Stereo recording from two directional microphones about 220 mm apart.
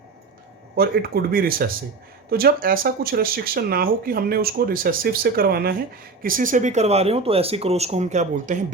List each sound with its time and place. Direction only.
0.8 s speech: 45° right (ahead or behind)